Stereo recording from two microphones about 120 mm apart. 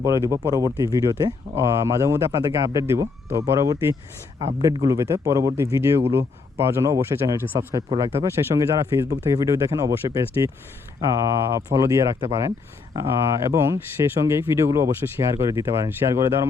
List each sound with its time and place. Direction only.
0.0 s speech: 25° right (ahead or behind)